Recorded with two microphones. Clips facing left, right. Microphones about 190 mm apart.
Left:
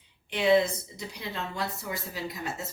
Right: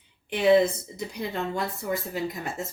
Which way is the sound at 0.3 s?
50° right (ahead or behind).